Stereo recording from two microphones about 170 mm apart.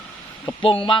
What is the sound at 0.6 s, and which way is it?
Speech, 30° left (ahead or behind).